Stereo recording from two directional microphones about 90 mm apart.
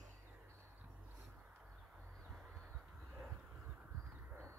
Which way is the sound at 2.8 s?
10° right (ahead or behind).